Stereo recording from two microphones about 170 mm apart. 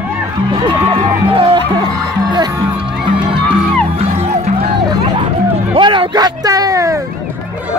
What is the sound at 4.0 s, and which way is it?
Music, 40° right (ahead or behind).